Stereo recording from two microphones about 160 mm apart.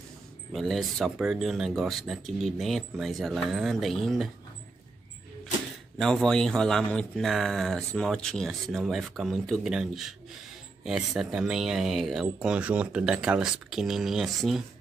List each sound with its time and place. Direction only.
0.5 s speech: centre (ahead or behind)
5.9 s speech: centre (ahead or behind)